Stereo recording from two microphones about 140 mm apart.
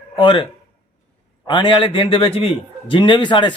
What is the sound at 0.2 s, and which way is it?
Speech, 35° left (ahead or behind).